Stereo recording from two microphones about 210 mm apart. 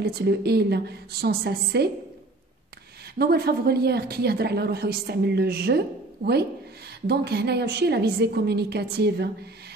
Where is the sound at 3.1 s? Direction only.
50° right (ahead or behind).